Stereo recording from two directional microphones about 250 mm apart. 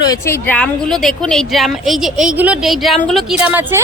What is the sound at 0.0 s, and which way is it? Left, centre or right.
A woman's voice, centre.